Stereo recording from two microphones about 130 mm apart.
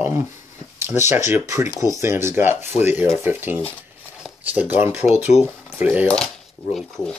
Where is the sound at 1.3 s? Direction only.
20° right (ahead or behind).